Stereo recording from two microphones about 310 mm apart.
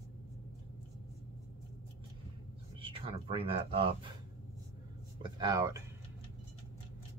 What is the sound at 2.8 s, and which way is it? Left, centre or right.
Speech, centre.